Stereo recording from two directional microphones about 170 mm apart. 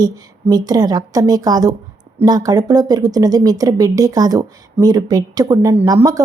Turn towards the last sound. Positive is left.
turn(degrees=-20)  # may be behind; listen again after turning